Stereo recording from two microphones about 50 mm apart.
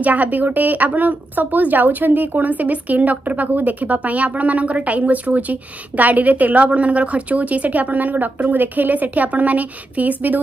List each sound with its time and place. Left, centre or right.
0.0 s a woman's voice: right